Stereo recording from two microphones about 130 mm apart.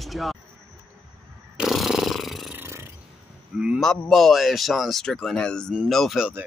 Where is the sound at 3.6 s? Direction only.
5° right (ahead or behind).